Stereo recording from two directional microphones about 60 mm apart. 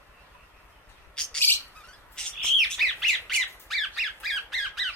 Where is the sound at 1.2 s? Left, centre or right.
Centre.